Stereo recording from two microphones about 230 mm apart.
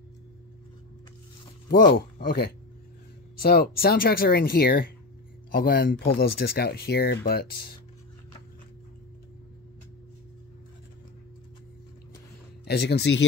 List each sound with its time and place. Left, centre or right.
1.7 s speech: left
12.6 s speech: left